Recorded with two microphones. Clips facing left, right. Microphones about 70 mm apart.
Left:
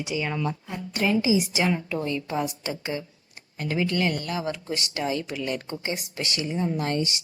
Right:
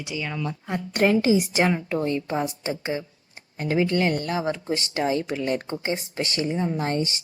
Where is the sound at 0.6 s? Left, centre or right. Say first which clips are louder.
Right 8 dB; right.